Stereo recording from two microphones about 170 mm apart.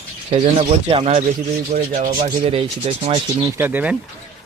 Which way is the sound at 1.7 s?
50° right (ahead or behind).